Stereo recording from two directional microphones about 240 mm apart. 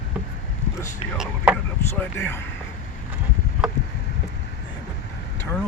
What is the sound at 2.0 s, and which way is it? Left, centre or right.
Speech, centre.